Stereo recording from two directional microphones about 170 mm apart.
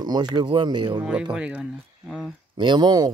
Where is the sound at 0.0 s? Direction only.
25° right (ahead or behind).